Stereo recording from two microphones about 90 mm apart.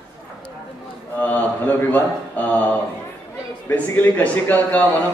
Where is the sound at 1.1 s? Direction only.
20° left (ahead or behind).